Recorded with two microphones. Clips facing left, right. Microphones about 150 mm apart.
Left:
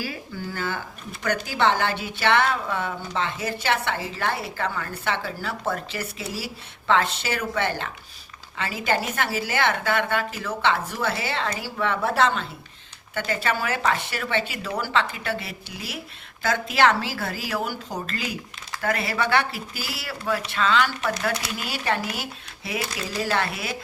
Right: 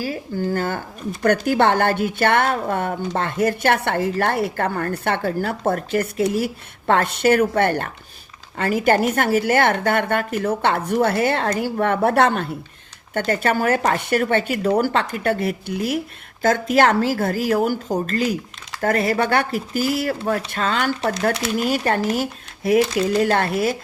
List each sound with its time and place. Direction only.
0.0 s a woman's voice: 45° right (ahead or behind)